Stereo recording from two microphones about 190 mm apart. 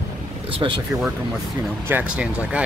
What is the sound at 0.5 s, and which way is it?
Speech, 25° right (ahead or behind).